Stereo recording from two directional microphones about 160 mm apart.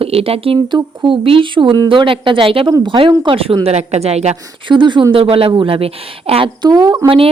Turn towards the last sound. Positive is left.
turn(degrees=-25)  # may be behind; listen again after turning